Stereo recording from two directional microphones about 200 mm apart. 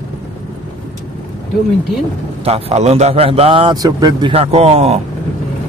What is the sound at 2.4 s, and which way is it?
Speech, 30° right (ahead or behind).